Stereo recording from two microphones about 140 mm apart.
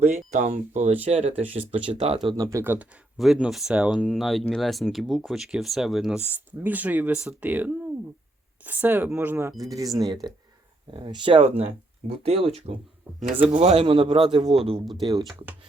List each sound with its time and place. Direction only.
0.1 s speech: 60° right (ahead or behind)
1.7 s speech: 45° right (ahead or behind)
2.1 s speech: 30° right (ahead or behind); by 3.0 s 15° right (ahead or behind)
3.2 s speech: centre (ahead or behind)
9.6 s a man's voice: 25° right (ahead or behind); by 14.8 s 45° right (ahead or behind)